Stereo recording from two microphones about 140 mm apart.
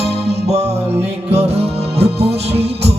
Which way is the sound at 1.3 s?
45° right (ahead or behind).